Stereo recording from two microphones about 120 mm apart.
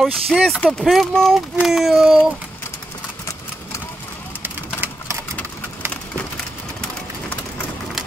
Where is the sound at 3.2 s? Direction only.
25° left (ahead or behind).